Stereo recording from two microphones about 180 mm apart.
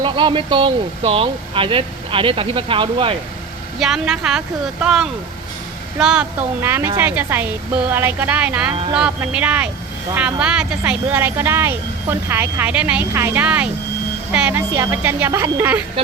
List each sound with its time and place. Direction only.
0.0 s speech: 25° right (ahead or behind)
3.8 s speech: centre (ahead or behind)